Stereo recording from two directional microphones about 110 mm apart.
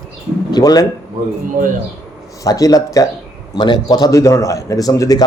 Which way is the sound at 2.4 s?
35° left (ahead or behind).